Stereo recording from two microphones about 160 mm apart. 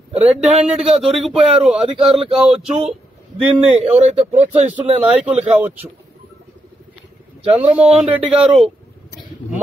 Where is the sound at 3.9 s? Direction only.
40° right (ahead or behind).